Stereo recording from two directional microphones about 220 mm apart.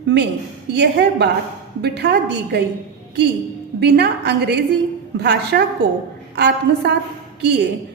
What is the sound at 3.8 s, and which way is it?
A woman's voice, 50° right (ahead or behind).